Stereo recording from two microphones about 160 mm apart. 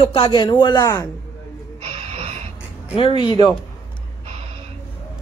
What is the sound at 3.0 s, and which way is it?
Speech, 35° left (ahead or behind).